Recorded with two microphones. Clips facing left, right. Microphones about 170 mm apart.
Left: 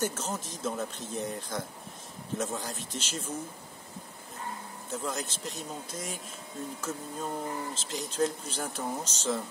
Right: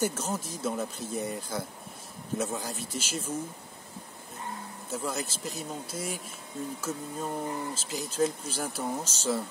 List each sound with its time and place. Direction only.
0.0 s speech: 10° right (ahead or behind)
4.9 s speech: 5° right (ahead or behind)